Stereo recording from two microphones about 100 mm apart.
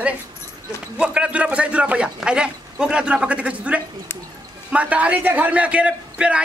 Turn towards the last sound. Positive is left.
turn(degrees=-10)  # may be behind; listen again after turning